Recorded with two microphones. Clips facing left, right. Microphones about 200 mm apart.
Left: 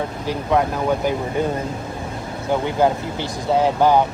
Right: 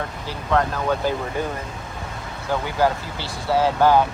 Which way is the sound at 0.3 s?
15° left (ahead or behind).